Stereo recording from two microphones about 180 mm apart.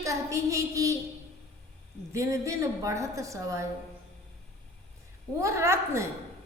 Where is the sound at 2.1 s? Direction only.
15° right (ahead or behind).